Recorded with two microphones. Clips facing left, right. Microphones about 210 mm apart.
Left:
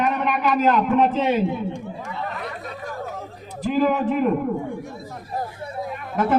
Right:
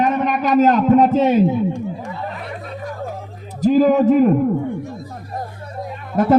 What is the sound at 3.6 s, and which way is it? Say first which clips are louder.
Speech: right 7 dB; 40° right (ahead or behind).